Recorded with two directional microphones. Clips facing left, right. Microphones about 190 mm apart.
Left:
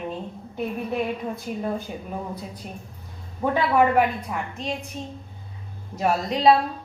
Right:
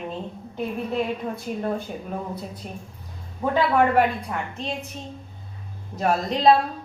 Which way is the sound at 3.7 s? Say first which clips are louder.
Left 1 dB; 5° left (ahead or behind).